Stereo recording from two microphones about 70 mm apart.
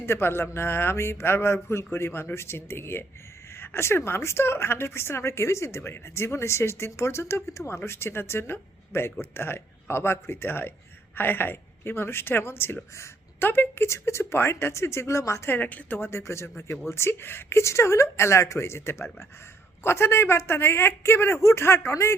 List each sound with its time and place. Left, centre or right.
0.0 s speech: left
15.4 s a woman's voice: left
16.0 s speech: left